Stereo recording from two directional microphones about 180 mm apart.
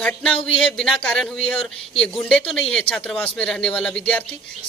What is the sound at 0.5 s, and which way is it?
Speech, centre (ahead or behind).